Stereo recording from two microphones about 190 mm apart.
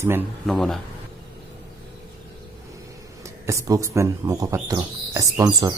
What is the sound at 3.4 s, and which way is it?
Speech, 15° right (ahead or behind).